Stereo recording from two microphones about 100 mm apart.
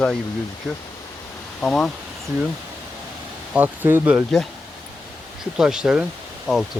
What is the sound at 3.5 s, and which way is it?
Speech, 20° right (ahead or behind).